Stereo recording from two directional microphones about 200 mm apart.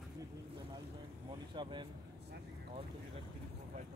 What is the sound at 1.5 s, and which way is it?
Speech, 20° right (ahead or behind).